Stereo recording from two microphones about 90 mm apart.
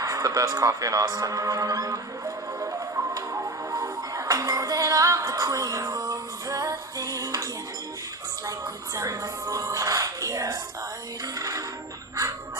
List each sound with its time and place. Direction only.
0.0 s music: 40° right (ahead or behind)
9.0 s music: 40° right (ahead or behind)